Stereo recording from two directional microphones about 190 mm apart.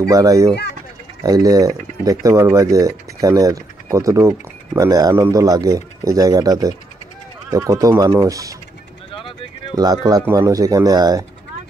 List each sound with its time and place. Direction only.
0.0 s speech: 15° right (ahead or behind)
9.1 s a sound: 25° left (ahead or behind)
9.8 s speech: 20° right (ahead or behind)